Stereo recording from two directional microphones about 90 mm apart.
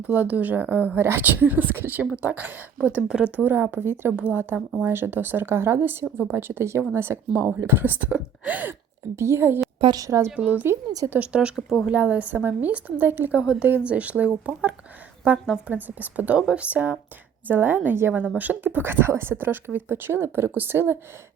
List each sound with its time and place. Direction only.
0.1 s a woman's voice: 20° right (ahead or behind)
3.3 s a woman's voice: 25° right (ahead or behind)
9.1 s a woman's voice: 30° right (ahead or behind)
10.3 s a woman's voice: 15° right (ahead or behind)